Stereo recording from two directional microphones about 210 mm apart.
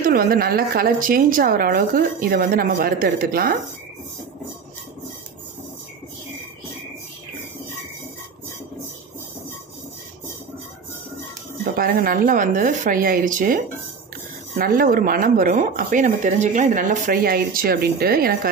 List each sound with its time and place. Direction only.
0.0 s speech: 45° right (ahead or behind)
11.6 s speech: 45° right (ahead or behind)
14.6 s speech: 45° right (ahead or behind)